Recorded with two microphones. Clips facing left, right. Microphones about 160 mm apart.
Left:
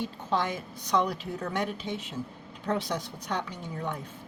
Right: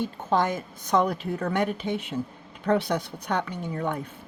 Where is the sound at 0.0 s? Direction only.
45° right (ahead or behind).